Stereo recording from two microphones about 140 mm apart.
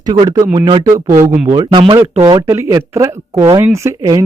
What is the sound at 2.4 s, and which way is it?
Speech, 20° right (ahead or behind).